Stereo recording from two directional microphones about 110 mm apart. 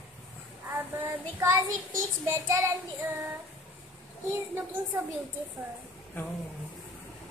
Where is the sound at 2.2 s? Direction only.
30° right (ahead or behind).